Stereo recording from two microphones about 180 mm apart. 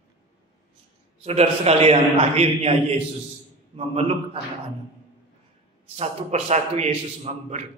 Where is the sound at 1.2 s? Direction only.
35° right (ahead or behind).